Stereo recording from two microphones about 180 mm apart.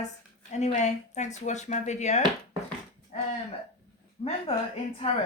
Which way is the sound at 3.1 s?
35° left (ahead or behind).